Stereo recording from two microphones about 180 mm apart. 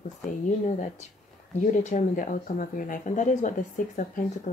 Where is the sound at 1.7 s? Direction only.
40° left (ahead or behind).